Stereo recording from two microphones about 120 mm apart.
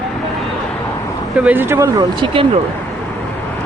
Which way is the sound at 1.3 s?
10° right (ahead or behind).